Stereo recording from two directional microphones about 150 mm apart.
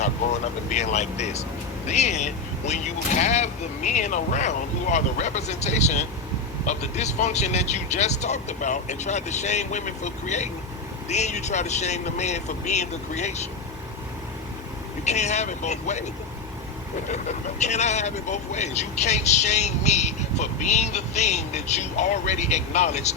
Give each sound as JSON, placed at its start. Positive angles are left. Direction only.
{"t": 0.7, "sound": "speech", "side_deg": 50}
{"t": 15.0, "sound": "speech", "side_deg": 50}
{"t": 17.1, "sound": "speech", "side_deg": 50}